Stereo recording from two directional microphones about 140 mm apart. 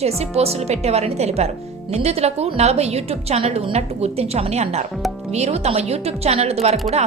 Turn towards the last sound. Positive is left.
turn(degrees=-50)  # may be behind; listen again after turning